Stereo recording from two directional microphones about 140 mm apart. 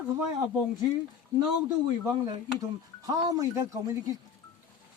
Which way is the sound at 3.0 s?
25° right (ahead or behind).